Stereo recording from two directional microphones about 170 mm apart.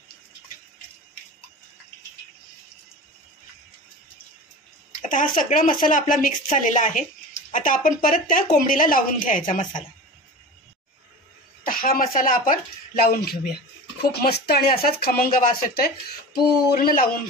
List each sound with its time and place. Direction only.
5.0 s speech: 50° left (ahead or behind)
11.6 s speech: 55° left (ahead or behind)